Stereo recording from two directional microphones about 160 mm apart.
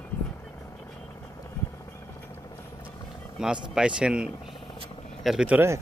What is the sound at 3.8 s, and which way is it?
Speech, 5° right (ahead or behind).